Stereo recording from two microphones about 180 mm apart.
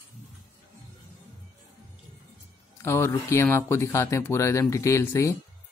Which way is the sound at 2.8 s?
15° left (ahead or behind).